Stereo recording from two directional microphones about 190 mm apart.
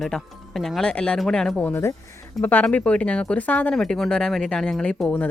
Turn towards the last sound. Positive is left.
turn(degrees=5)  # may be behind; listen again after turning